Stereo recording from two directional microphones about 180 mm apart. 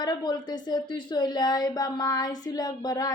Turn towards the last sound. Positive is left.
turn(degrees=20)  # may be behind; listen again after turning